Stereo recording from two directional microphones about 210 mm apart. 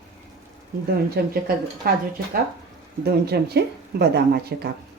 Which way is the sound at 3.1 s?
50° right (ahead or behind).